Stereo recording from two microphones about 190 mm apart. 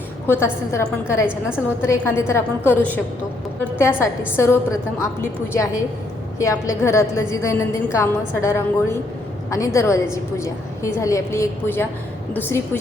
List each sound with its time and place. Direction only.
0.3 s a woman's voice: 10° left (ahead or behind)